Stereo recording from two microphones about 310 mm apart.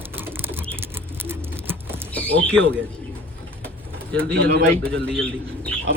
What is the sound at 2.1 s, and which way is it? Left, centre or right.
Speech, centre.